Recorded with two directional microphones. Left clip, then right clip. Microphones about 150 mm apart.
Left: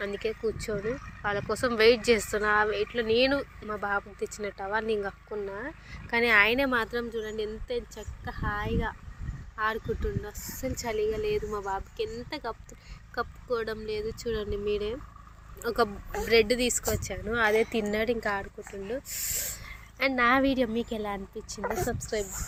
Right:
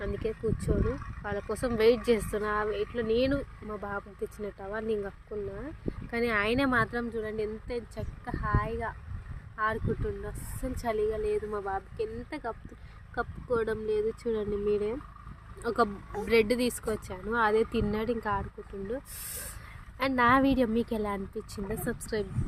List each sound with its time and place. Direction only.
0.0 s speech: 25° right (ahead or behind)